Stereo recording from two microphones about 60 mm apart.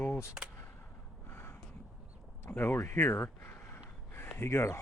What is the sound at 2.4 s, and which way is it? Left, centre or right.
Speech, left.